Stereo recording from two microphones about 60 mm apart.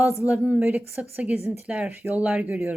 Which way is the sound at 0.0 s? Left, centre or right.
Right.